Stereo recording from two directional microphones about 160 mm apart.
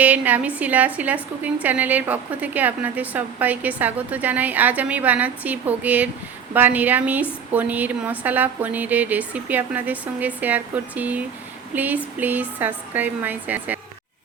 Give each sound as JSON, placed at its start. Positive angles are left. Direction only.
{"t": 0.0, "sound": "a woman's voice", "side_deg": -10}